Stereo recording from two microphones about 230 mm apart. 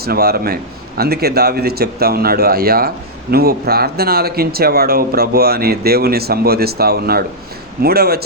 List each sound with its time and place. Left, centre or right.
0.0 s speech: right